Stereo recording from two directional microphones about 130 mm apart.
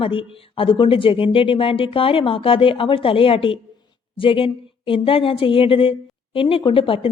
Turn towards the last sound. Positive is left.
turn(degrees=45)  # may be behind; listen again after turning